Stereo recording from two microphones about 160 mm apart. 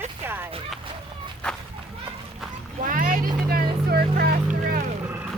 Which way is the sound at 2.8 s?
55° right (ahead or behind).